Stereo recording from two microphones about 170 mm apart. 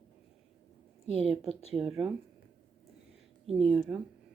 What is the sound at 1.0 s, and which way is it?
Speech, 5° right (ahead or behind).